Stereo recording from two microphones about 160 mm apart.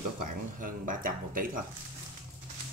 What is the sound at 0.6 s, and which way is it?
Speech, 60° right (ahead or behind).